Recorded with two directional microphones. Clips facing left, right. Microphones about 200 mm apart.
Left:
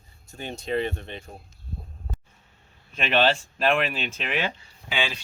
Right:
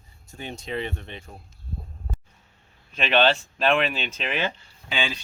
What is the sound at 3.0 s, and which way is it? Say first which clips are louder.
Speech: right 1 dB; 5° left (ahead or behind).